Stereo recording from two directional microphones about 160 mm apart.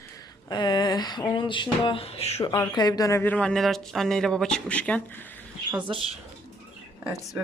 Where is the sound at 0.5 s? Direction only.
25° left (ahead or behind).